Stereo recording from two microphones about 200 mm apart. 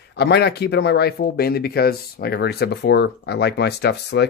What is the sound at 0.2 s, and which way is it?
Speech, 55° left (ahead or behind).